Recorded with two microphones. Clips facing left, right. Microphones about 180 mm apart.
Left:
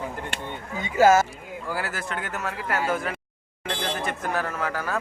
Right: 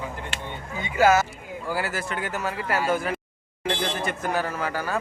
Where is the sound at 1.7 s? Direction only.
Centre (ahead or behind).